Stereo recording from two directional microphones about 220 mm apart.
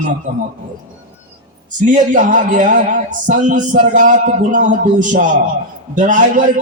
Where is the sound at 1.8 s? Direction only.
35° right (ahead or behind).